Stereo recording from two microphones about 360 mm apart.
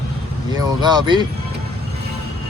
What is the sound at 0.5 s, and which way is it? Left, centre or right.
Speech, centre.